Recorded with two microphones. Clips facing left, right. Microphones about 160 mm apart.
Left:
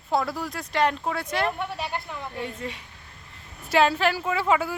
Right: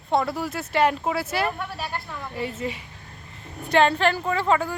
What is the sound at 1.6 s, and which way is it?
Speech, 20° left (ahead or behind).